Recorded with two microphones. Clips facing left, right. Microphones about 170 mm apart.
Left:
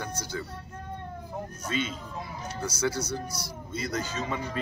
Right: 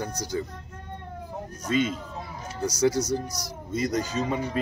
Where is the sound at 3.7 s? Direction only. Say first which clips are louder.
Right 6 dB; 40° right (ahead or behind).